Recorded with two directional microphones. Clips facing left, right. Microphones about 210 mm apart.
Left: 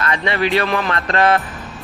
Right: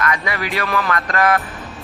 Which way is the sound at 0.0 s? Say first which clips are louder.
Left 3 dB; 30° left (ahead or behind).